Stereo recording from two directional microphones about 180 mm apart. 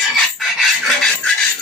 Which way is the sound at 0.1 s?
Centre (ahead or behind).